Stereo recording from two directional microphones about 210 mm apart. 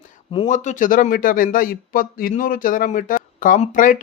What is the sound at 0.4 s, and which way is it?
Speech, 35° left (ahead or behind).